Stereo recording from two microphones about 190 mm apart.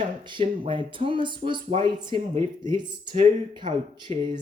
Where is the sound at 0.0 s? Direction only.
25° right (ahead or behind).